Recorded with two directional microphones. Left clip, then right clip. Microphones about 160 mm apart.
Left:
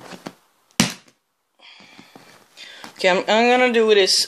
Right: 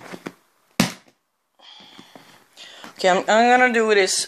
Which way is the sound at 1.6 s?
10° left (ahead or behind).